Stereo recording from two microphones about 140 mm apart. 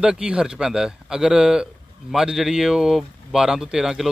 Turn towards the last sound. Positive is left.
turn(degrees=-5)  # may be behind; listen again after turning